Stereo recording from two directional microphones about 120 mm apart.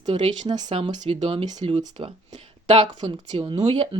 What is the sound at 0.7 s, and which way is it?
Speech, 55° right (ahead or behind).